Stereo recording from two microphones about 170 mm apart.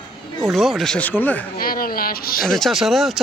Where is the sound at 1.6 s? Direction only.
60° left (ahead or behind).